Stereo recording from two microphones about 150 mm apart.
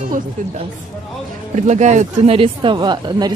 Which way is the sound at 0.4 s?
60° right (ahead or behind).